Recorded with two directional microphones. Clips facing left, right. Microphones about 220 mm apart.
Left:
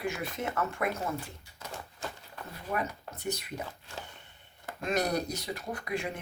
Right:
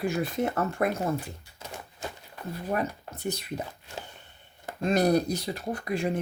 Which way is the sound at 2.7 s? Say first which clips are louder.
Right 4 dB; 35° right (ahead or behind).